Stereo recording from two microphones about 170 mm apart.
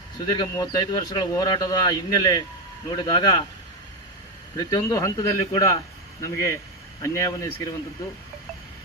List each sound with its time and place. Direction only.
0.3 s speech: 20° left (ahead or behind)
4.5 s speech: 20° left (ahead or behind)